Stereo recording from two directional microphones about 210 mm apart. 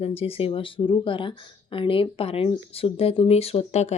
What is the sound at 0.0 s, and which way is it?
Speech, 25° left (ahead or behind).